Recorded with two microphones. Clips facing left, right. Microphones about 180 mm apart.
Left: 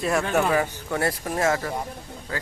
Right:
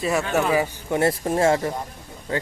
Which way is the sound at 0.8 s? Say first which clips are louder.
Right 5 dB; 20° right (ahead or behind).